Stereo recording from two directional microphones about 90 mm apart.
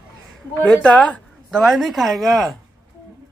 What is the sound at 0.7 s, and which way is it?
Speech, 15° left (ahead or behind).